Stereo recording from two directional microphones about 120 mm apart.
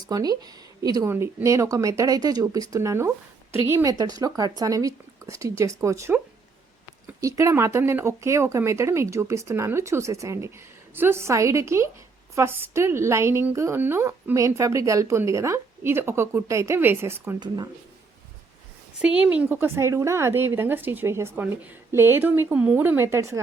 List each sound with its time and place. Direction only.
0.1 s speech: 35° right (ahead or behind)
1.1 s a woman's voice: 20° right (ahead or behind)
3.9 s a woman's voice: 30° right (ahead or behind)
18.9 s a woman's voice: 10° right (ahead or behind); by 23.4 s 25° right (ahead or behind)